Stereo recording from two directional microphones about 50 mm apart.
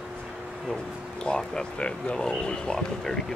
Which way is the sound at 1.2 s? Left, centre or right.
Centre.